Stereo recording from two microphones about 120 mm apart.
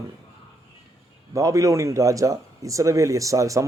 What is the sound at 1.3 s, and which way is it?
Speech, 30° right (ahead or behind).